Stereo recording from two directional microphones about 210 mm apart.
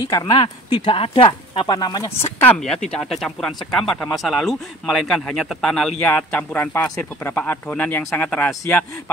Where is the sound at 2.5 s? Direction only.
5° left (ahead or behind).